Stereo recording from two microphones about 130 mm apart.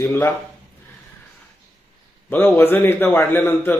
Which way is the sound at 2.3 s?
15° left (ahead or behind).